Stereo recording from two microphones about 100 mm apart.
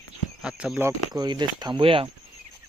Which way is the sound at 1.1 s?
45° right (ahead or behind).